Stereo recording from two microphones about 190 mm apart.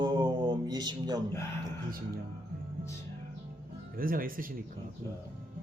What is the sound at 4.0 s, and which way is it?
Speech, 50° right (ahead or behind).